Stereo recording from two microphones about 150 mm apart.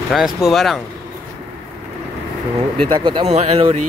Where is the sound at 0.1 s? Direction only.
Centre (ahead or behind).